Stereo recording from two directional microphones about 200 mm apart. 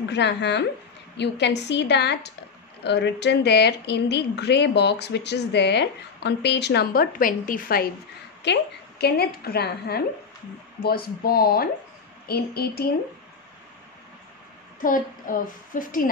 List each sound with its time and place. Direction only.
0.1 s a woman's voice: 60° left (ahead or behind)
14.8 s a woman's voice: 40° left (ahead or behind)